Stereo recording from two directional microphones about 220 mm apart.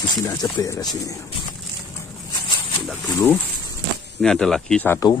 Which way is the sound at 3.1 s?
10° left (ahead or behind).